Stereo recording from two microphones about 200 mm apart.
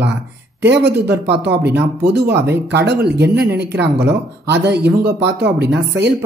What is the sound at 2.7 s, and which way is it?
Speech, 55° right (ahead or behind).